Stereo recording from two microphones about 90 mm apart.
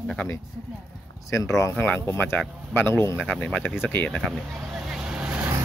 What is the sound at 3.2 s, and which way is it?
Speech, 15° left (ahead or behind).